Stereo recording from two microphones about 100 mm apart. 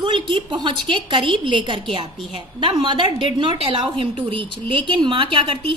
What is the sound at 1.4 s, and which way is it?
A woman's voice, 55° right (ahead or behind).